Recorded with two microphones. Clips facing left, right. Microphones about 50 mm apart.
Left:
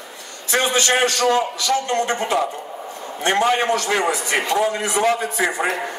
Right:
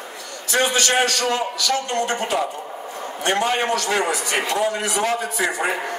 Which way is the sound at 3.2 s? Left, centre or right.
Left.